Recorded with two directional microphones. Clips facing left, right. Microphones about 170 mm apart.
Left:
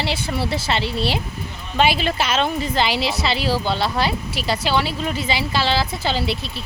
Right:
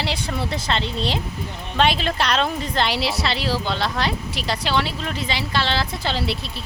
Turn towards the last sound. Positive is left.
turn(degrees=0)  # may be behind; listen again after turning